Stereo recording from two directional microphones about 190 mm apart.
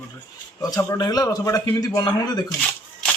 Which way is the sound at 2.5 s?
5° left (ahead or behind).